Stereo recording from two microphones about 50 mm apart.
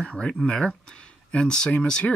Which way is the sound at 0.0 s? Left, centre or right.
Centre.